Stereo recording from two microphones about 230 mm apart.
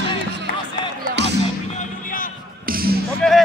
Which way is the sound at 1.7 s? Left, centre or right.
Left.